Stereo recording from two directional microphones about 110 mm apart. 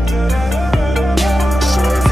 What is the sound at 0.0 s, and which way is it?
Music, centre (ahead or behind).